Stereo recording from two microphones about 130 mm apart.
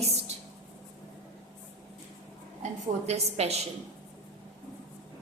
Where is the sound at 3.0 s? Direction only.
55° right (ahead or behind).